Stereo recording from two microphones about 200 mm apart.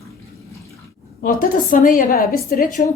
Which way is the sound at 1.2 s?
45° left (ahead or behind).